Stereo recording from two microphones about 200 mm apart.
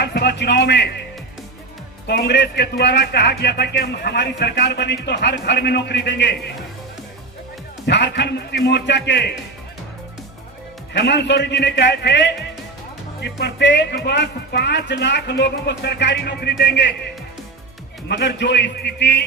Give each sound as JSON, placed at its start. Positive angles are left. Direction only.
{"t": 0.0, "sound": "a man's voice", "side_deg": 55}
{"t": 2.0, "sound": "speech", "side_deg": 60}
{"t": 7.9, "sound": "speech", "side_deg": 60}
{"t": 10.9, "sound": "speech", "side_deg": 60}
{"t": 18.1, "sound": "speech", "side_deg": 60}